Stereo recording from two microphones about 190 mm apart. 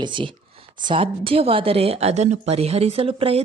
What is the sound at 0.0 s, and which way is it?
Speech, 25° right (ahead or behind).